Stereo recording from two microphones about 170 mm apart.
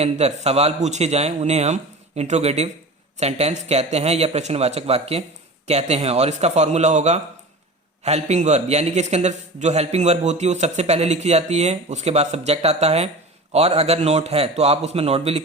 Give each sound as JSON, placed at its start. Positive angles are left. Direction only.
{"t": 0.0, "sound": "a man's voice", "side_deg": -40}